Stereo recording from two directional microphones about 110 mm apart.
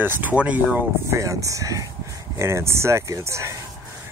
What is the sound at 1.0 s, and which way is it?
Speech, 30° right (ahead or behind).